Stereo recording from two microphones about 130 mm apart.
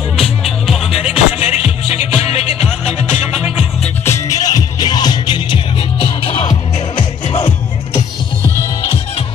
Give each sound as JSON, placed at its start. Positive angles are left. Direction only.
{"t": 0.2, "sound": "music", "side_deg": 50}
{"t": 4.0, "sound": "music", "side_deg": 25}
{"t": 7.0, "sound": "music", "side_deg": 60}